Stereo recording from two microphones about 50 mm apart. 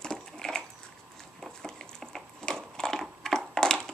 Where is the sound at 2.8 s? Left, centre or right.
Centre.